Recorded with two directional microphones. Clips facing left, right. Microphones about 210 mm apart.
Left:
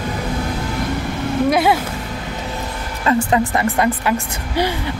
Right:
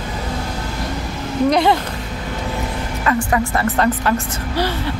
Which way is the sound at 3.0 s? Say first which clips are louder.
Left 3 dB; 25° left (ahead or behind).